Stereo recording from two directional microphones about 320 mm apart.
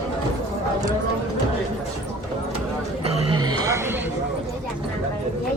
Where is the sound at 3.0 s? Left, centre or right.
Centre.